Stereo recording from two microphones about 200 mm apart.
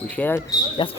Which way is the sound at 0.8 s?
25° left (ahead or behind).